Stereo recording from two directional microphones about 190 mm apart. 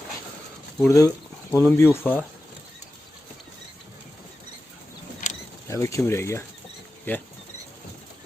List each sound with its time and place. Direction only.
0.9 s speech: 15° left (ahead or behind)
5.2 s a sound: 40° left (ahead or behind)
5.6 s speech: 15° left (ahead or behind)